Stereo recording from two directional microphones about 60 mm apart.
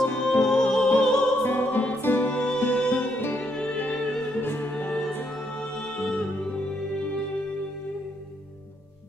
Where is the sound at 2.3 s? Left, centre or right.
Centre.